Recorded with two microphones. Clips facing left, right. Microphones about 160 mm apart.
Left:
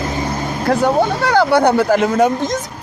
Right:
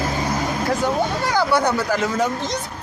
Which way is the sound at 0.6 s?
65° left (ahead or behind).